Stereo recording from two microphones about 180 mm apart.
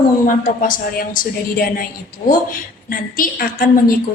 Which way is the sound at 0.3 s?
50° left (ahead or behind).